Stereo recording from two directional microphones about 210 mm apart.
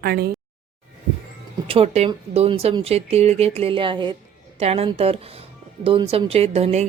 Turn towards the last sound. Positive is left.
turn(degrees=-30)  # may be behind; listen again after turning